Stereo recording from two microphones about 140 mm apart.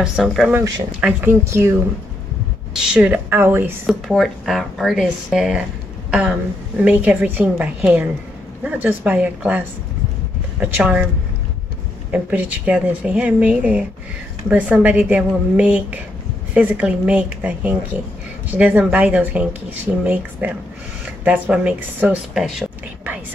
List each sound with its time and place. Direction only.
0.0 s speech: 5° right (ahead or behind)
0.5 s speech: 15° right (ahead or behind)
2.7 s speech: 5° right (ahead or behind)
3.8 s speech: centre (ahead or behind)
6.8 s speech: 10° right (ahead or behind)
12.1 s speech: 10° right (ahead or behind)